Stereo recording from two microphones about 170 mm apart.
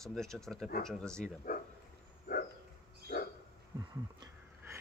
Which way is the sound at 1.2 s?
55° left (ahead or behind).